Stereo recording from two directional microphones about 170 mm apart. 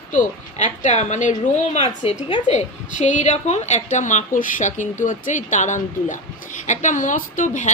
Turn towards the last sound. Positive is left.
turn(degrees=45)  # may be behind; listen again after turning